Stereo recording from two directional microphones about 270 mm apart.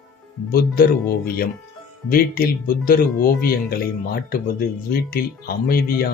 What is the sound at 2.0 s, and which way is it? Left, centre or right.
Speech, left.